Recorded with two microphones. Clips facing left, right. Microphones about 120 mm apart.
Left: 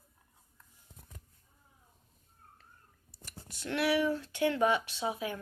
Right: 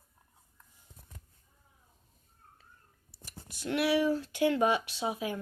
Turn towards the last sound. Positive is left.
turn(degrees=-20)  # may be behind; listen again after turning